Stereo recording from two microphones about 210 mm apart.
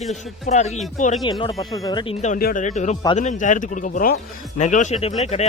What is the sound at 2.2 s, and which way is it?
Speech, 40° left (ahead or behind).